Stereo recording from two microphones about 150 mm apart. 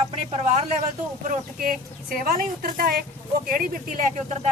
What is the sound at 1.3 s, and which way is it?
A woman's voice, 70° right (ahead or behind).